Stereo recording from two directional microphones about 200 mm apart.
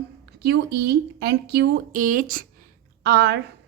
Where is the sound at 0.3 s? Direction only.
55° right (ahead or behind).